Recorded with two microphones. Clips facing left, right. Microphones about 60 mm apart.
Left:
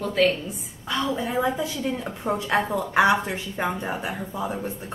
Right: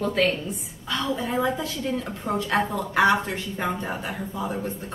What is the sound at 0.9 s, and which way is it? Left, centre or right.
A woman's voice, centre.